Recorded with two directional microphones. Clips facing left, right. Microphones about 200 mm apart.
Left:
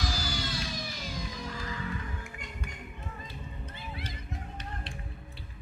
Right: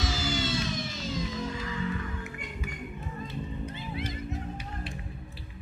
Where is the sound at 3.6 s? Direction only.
15° right (ahead or behind).